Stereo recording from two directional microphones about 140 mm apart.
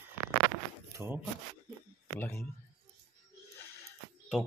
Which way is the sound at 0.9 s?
20° right (ahead or behind).